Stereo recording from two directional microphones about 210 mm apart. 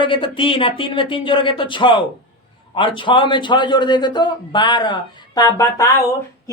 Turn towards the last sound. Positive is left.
turn(degrees=15)  # may be behind; listen again after turning